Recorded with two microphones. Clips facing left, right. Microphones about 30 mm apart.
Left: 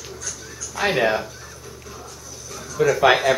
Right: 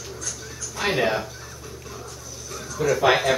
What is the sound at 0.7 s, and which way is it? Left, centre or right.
Speech, centre.